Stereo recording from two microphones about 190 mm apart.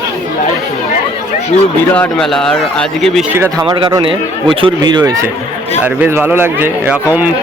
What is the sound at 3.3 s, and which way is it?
Speech, 15° right (ahead or behind).